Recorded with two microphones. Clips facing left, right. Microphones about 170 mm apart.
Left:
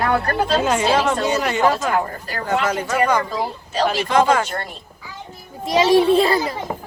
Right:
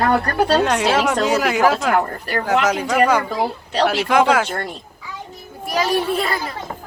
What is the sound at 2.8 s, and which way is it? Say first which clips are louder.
Speech: right 2 dB; 10° right (ahead or behind).